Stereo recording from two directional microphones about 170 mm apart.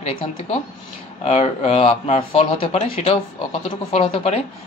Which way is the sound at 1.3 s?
40° left (ahead or behind).